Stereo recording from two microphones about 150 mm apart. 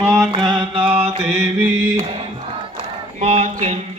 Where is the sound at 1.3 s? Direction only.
10° right (ahead or behind).